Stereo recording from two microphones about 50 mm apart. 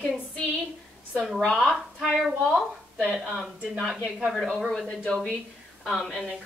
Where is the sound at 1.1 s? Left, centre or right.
Centre.